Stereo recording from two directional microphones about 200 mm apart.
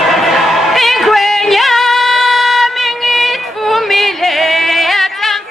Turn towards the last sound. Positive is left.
turn(degrees=0)  # may be behind; listen again after turning